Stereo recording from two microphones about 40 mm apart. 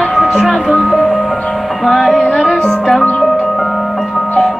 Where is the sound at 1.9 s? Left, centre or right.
Centre.